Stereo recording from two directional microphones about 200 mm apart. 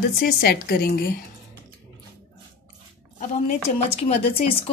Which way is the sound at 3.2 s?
30° left (ahead or behind).